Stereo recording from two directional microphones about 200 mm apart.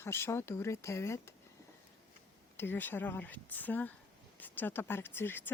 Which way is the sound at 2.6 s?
10° left (ahead or behind).